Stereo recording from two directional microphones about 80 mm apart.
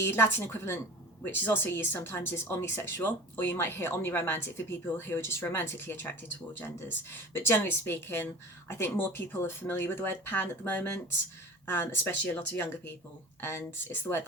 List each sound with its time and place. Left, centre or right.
0.1 s speech: left